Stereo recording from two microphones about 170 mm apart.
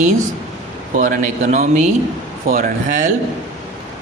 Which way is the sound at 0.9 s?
50° right (ahead or behind).